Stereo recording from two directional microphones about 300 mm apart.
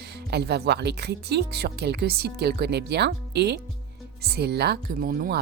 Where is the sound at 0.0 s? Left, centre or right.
Right.